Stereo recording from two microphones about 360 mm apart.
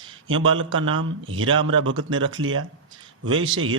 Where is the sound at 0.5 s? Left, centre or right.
Right.